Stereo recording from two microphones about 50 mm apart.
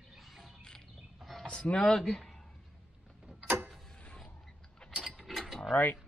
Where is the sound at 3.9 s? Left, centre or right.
Left.